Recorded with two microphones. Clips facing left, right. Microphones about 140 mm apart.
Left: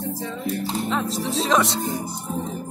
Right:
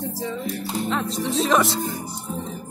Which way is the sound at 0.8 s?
Centre (ahead or behind).